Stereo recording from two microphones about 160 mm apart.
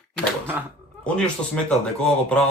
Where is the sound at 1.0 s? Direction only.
5° left (ahead or behind).